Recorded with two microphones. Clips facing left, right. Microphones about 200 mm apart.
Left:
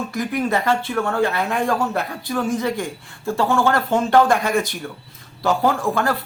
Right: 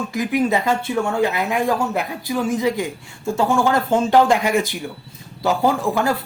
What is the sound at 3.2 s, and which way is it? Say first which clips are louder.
Speech: right 1 dB; 15° right (ahead or behind).